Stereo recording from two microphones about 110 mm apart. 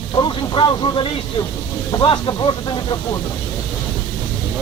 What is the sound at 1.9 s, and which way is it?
Speech, 40° left (ahead or behind).